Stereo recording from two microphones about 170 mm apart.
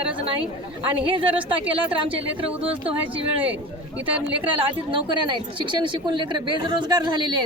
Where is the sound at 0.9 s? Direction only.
30° right (ahead or behind).